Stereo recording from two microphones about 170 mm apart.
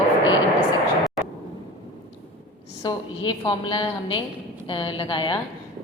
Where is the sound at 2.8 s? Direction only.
25° left (ahead or behind).